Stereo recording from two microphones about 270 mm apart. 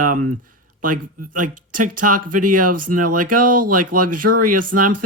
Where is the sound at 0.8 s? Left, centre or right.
Right.